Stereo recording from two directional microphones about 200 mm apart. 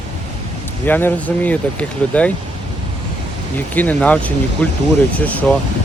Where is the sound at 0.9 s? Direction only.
10° left (ahead or behind).